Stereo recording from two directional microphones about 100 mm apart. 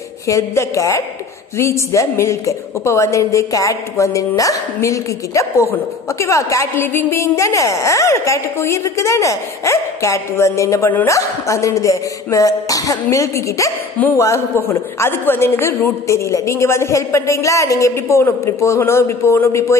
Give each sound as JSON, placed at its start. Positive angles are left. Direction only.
{"t": 0.3, "sound": "a woman's voice", "side_deg": 30}